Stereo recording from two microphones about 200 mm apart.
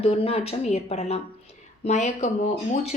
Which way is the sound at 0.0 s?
30° left (ahead or behind).